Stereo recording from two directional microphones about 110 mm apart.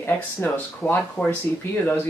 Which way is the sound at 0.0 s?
20° left (ahead or behind).